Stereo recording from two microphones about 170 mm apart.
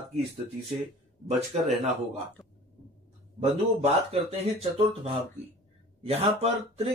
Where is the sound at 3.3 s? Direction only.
35° right (ahead or behind).